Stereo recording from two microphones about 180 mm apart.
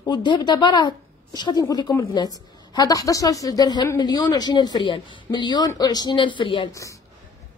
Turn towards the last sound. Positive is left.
turn(degrees=20)  # may be behind; listen again after turning